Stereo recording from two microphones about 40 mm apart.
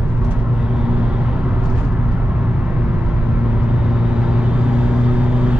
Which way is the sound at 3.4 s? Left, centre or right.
Right.